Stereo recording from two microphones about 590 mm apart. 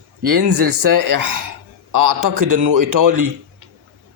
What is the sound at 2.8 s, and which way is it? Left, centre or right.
Speech, right.